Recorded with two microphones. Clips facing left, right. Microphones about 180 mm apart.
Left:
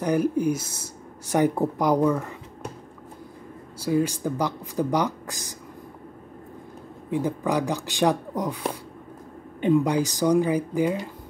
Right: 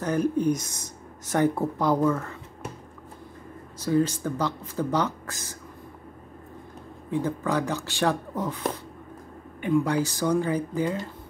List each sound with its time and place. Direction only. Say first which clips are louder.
0.0 s speech: left 2 dB; 15° left (ahead or behind)
3.8 s speech: even; 10° left (ahead or behind)
7.1 s speech: left 2 dB; 15° left (ahead or behind)